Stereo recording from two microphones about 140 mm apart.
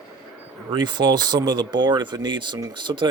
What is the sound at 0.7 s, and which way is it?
Speech, 30° right (ahead or behind).